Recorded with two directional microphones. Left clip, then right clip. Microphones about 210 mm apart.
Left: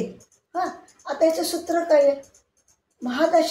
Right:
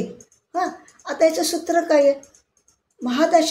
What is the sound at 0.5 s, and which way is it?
Speech, 55° right (ahead or behind).